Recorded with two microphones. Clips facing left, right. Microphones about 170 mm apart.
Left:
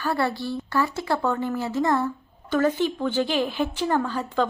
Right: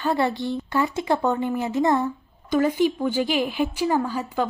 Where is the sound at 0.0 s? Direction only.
20° right (ahead or behind).